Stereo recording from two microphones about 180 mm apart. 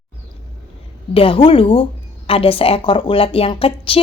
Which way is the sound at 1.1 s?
30° left (ahead or behind).